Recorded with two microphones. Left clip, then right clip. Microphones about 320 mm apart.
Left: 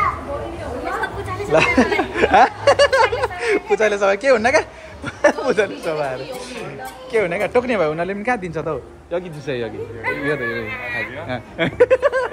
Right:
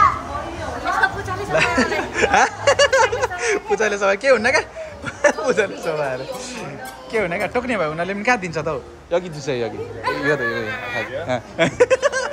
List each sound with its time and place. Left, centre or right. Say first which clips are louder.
1.5 s speech: left 3 dB; centre
10.0 s speech: right 2 dB; right
11.2 s speech: right 3 dB; centre